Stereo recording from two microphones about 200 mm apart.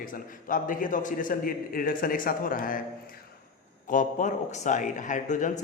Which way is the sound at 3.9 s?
40° left (ahead or behind).